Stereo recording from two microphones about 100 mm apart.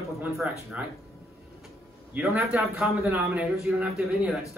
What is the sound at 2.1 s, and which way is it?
A man's voice, 15° right (ahead or behind).